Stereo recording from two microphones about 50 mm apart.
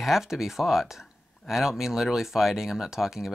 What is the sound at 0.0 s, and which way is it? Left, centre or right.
Speech, centre.